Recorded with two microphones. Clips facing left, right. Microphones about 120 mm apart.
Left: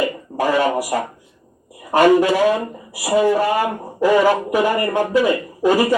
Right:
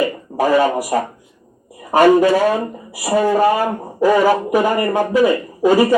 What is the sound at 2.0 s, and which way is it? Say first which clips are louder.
Speech: right 2 dB; 40° right (ahead or behind).